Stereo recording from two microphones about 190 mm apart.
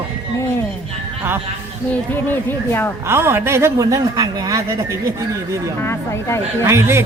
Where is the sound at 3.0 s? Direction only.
15° right (ahead or behind).